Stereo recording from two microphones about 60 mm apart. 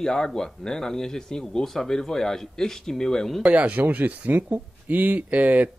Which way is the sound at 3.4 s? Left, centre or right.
Right.